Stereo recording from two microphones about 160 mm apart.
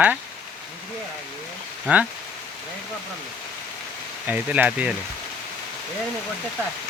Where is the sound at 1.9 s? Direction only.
10° right (ahead or behind).